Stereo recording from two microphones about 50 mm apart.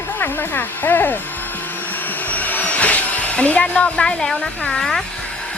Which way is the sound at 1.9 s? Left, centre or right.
Left.